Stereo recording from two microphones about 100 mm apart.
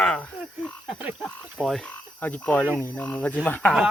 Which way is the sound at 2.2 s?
15° left (ahead or behind).